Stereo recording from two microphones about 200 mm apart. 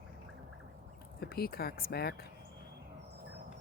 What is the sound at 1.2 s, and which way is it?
Speech, 50° left (ahead or behind).